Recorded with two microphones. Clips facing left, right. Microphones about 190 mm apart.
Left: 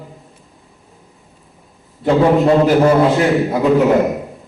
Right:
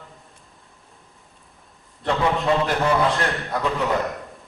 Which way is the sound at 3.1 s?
5° left (ahead or behind).